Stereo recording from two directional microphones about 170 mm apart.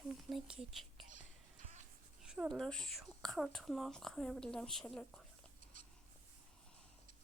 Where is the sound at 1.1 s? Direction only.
50° right (ahead or behind).